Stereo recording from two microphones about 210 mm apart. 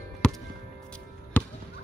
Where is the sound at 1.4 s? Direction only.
10° left (ahead or behind).